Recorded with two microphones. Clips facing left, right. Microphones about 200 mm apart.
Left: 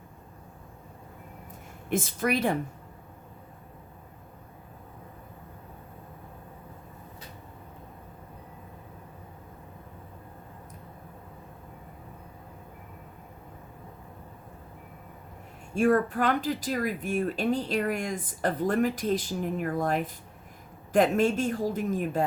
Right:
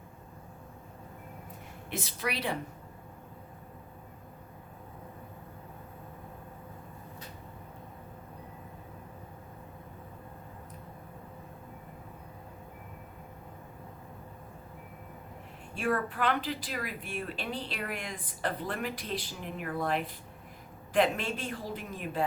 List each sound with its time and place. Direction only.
1.9 s speech: 50° left (ahead or behind)
15.7 s speech: 45° left (ahead or behind)